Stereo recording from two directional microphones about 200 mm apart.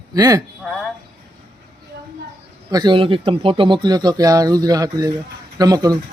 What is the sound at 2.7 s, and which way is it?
Speech, 25° right (ahead or behind).